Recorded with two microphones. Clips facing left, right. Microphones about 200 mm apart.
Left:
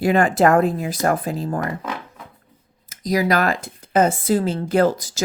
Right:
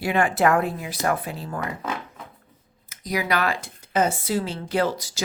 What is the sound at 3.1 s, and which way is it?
Speech, 40° left (ahead or behind).